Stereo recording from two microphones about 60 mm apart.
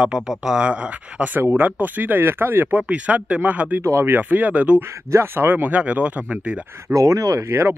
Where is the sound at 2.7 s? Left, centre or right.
Right.